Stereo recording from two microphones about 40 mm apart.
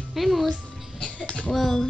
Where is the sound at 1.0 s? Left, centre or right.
Left.